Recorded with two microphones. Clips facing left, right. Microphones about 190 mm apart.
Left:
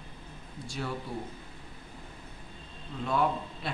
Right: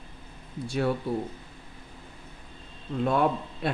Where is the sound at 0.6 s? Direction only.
60° right (ahead or behind).